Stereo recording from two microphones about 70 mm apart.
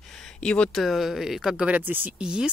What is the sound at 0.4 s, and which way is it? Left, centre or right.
Speech, centre.